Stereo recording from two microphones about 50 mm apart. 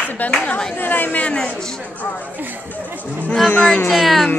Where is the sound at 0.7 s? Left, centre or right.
Left.